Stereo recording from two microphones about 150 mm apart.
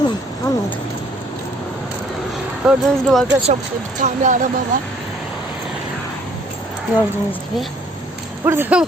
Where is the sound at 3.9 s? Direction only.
55° right (ahead or behind).